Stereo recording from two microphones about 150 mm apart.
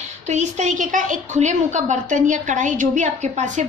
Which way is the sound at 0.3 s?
50° right (ahead or behind).